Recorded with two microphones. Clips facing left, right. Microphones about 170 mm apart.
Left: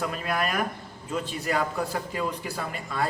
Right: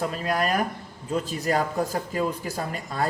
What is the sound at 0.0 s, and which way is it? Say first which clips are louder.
A man's voice: right 3 dB; 35° right (ahead or behind).